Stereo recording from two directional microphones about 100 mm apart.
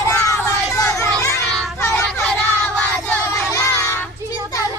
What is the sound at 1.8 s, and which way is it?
Child singing, 25° left (ahead or behind).